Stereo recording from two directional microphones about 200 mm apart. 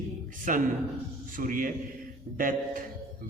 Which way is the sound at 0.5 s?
40° right (ahead or behind).